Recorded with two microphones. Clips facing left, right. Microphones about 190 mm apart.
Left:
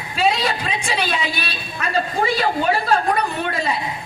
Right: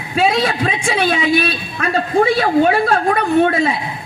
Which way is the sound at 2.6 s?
60° right (ahead or behind).